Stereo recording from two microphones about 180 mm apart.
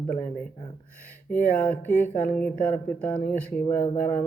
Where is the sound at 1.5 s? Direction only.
10° left (ahead or behind).